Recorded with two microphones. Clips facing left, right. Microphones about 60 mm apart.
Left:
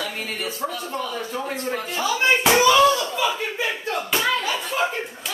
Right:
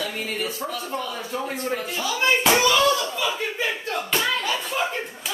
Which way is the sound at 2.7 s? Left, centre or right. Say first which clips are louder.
Left 3 dB; centre.